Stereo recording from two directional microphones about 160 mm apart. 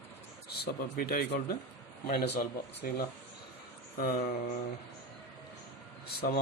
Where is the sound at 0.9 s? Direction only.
70° left (ahead or behind).